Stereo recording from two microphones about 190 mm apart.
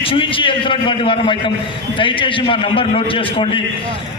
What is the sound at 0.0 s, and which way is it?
A man's voice, 30° left (ahead or behind).